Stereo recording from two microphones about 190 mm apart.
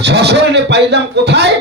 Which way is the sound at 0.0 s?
60° right (ahead or behind).